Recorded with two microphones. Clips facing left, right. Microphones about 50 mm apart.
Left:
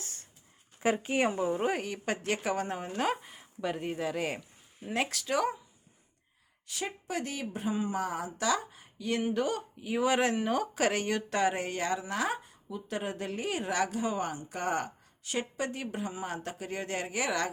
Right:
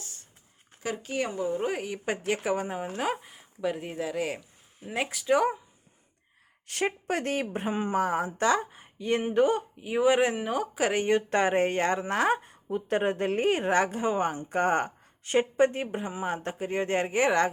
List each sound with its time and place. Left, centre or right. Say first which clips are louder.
0.8 s speech: left 3 dB; left
1.6 s speech: right 1 dB; centre; by 5.5 s right
6.7 s speech: right 8 dB; right; by 10.9 s centre
10.9 s speech: right 6 dB; right